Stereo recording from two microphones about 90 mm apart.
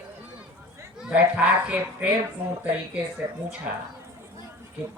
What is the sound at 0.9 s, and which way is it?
Speech, 10° right (ahead or behind).